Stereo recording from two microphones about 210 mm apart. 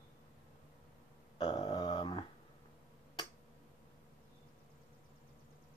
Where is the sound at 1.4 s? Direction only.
25° left (ahead or behind).